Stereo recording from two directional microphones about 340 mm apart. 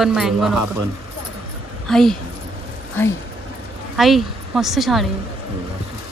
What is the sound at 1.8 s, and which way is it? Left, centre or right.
Speech, centre.